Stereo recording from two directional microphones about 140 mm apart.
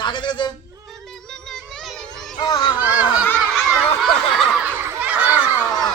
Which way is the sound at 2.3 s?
30° left (ahead or behind).